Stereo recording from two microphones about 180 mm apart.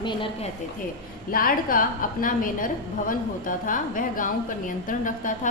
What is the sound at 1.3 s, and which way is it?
A woman's voice, 55° left (ahead or behind).